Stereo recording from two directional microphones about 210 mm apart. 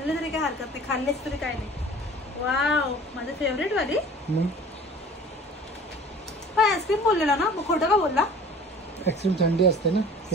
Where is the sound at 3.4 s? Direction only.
60° left (ahead or behind).